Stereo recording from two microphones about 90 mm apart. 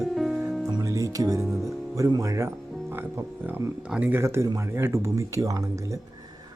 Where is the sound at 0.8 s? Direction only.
40° right (ahead or behind).